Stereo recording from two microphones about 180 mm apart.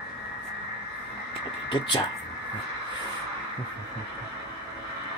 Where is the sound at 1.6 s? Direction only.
25° left (ahead or behind).